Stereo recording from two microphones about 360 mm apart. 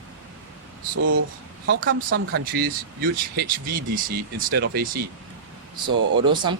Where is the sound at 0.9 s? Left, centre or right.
Right.